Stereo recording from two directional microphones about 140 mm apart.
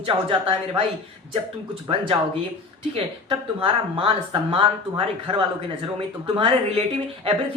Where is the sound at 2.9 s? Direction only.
40° right (ahead or behind).